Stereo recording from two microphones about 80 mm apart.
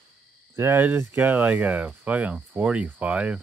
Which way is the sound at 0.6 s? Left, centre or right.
Right.